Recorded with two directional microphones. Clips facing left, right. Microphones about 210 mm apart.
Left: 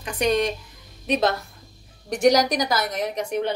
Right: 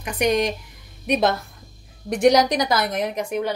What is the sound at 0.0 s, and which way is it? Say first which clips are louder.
Speech: right 1 dB; 15° right (ahead or behind).